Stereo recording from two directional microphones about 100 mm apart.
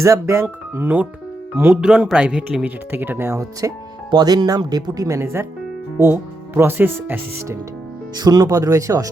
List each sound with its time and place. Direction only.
0.0 s speech: 30° right (ahead or behind)
4.1 s speech: 45° right (ahead or behind); by 7.6 s 25° right (ahead or behind)
8.2 s speech: 40° right (ahead or behind)